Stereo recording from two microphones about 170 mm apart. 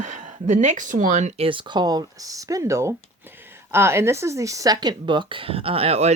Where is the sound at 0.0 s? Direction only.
45° right (ahead or behind).